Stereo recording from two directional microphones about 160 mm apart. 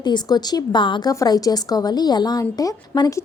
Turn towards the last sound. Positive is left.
turn(degrees=20)  # may be behind; listen again after turning